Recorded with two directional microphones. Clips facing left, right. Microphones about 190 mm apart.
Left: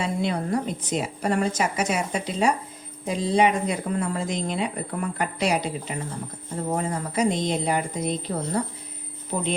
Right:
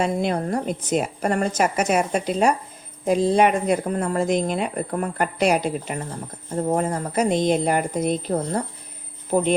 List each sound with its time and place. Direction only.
0.0 s a woman's voice: 50° right (ahead or behind)